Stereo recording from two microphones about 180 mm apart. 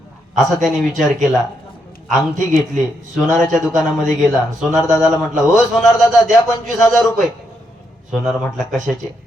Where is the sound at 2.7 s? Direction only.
Centre (ahead or behind).